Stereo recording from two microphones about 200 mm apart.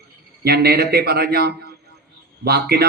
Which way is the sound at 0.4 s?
50° right (ahead or behind).